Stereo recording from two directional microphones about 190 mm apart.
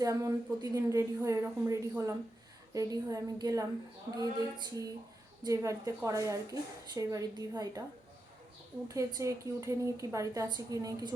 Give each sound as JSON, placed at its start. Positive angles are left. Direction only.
{"t": 0.0, "sound": "a woman's voice", "side_deg": -15}
{"t": 4.2, "sound": "female singing", "side_deg": -20}
{"t": 5.4, "sound": "a woman's voice", "side_deg": -20}
{"t": 8.9, "sound": "a woman's voice", "side_deg": -15}